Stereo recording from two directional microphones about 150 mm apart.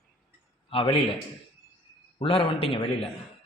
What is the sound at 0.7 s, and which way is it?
Speech, 40° left (ahead or behind).